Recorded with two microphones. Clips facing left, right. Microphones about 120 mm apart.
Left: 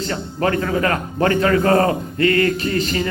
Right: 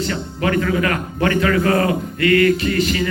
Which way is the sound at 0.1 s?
35° left (ahead or behind).